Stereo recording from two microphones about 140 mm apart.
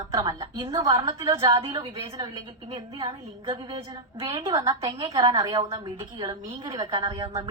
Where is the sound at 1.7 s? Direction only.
25° right (ahead or behind).